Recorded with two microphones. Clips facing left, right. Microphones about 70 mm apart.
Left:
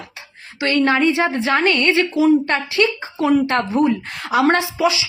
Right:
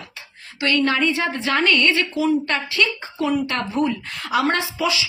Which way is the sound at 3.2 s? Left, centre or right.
Left.